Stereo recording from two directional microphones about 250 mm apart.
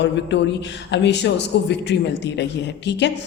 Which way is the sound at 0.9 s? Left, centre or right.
Left.